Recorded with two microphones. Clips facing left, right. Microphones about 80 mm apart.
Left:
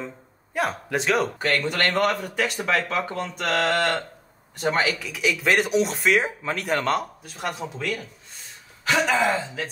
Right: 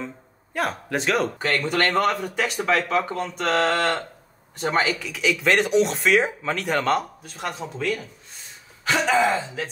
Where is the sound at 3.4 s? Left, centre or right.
Right.